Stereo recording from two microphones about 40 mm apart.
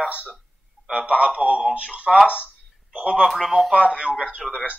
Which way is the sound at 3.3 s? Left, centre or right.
Centre.